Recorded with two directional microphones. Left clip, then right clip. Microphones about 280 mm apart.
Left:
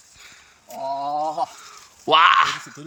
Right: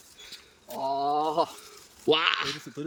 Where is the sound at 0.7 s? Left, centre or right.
Right.